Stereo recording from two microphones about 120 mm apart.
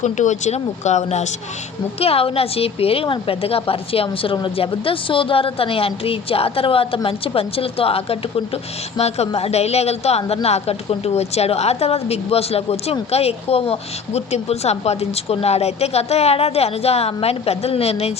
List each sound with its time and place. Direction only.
0.0 s speech: 80° left
2.0 s a woman's voice: 55° left (ahead or behind)